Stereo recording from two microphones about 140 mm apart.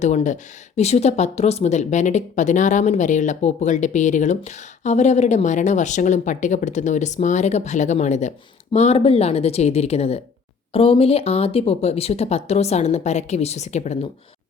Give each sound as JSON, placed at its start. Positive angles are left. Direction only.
{"t": 0.0, "sound": "speech", "side_deg": 55}